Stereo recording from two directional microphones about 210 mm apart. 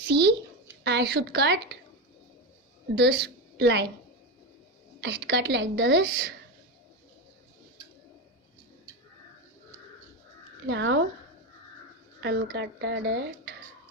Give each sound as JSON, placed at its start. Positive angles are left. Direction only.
{"t": 0.1, "sound": "a woman's voice", "side_deg": -50}
{"t": 2.9, "sound": "a woman's voice", "side_deg": -50}
{"t": 4.9, "sound": "a woman's voice", "side_deg": -55}
{"t": 10.7, "sound": "speech", "side_deg": -55}
{"t": 12.2, "sound": "speech", "side_deg": -55}